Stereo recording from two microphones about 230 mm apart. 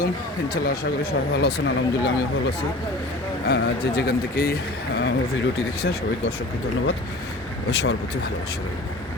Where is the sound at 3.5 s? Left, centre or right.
Left.